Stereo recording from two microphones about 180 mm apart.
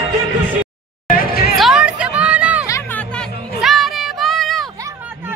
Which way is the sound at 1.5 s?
Centre (ahead or behind).